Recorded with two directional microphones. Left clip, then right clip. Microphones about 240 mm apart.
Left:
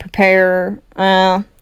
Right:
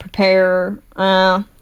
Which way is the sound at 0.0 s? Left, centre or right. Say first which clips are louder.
Left 2 dB; left.